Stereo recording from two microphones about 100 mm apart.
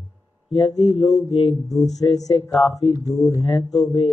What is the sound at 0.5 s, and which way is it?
Speech, 50° left (ahead or behind).